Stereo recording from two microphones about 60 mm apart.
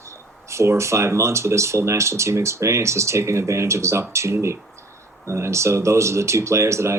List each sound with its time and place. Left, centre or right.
0.4 s speech: right